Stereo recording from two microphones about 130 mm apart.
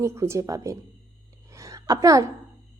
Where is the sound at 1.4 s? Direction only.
25° right (ahead or behind).